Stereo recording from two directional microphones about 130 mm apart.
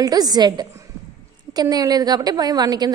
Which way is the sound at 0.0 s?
30° right (ahead or behind).